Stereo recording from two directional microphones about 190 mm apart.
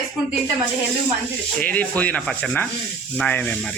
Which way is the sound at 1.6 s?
5° left (ahead or behind).